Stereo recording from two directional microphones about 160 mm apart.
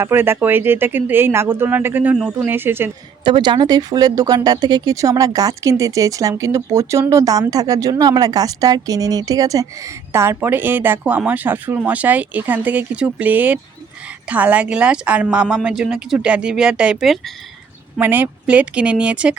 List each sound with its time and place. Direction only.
0.0 s speech: 15° right (ahead or behind)
2.1 s speech: centre (ahead or behind)
2.5 s speech: 15° right (ahead or behind)
3.2 s speech: 30° right (ahead or behind); by 17.3 s centre (ahead or behind)
18.0 s speech: 10° right (ahead or behind)